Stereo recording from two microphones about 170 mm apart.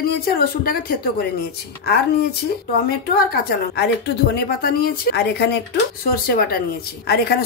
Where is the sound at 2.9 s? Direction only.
60° left (ahead or behind).